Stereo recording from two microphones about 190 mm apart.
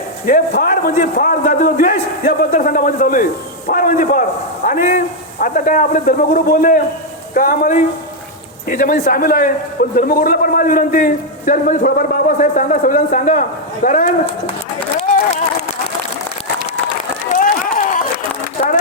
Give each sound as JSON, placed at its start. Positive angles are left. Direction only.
{"t": 0.3, "sound": "a man's voice", "side_deg": 45}
{"t": 17.2, "sound": "run", "side_deg": 45}